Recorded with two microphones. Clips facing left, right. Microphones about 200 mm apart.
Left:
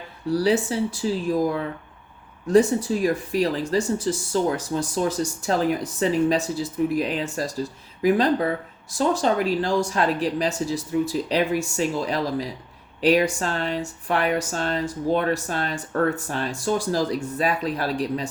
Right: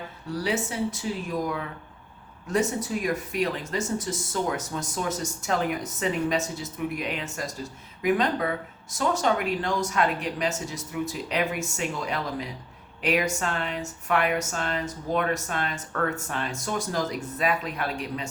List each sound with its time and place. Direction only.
0.3 s speech: 35° left (ahead or behind)